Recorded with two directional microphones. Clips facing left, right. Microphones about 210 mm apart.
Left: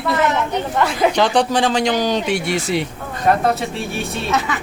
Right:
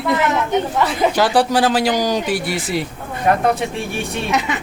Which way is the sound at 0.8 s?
Centre (ahead or behind).